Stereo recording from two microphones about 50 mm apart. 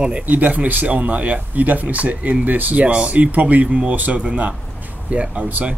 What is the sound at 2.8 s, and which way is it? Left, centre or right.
Speech, right.